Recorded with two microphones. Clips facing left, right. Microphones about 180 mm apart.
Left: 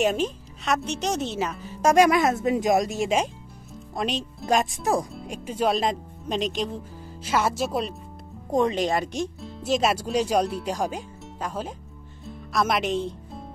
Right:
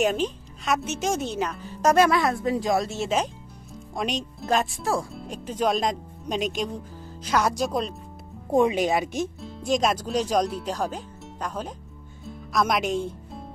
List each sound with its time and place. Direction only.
0.0 s a woman's voice: centre (ahead or behind)
3.9 s speech: centre (ahead or behind)
4.5 s a woman's voice: 15° left (ahead or behind)
8.5 s speech: 10° right (ahead or behind)